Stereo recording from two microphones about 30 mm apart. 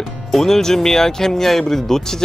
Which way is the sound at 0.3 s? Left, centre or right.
Centre.